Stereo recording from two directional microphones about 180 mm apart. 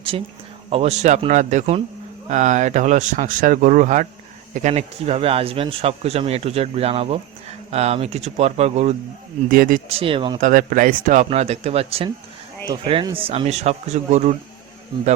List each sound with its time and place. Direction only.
0.1 s speech: 30° right (ahead or behind)
9.5 s speech: 50° right (ahead or behind)
9.9 s speech: 30° right (ahead or behind)
10.4 s speech: 50° right (ahead or behind)